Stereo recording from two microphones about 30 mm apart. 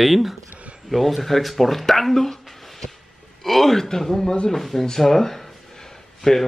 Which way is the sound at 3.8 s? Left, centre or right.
Centre.